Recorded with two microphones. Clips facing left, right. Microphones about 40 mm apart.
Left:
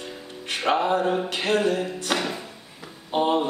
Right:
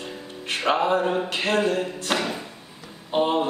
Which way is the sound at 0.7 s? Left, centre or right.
Centre.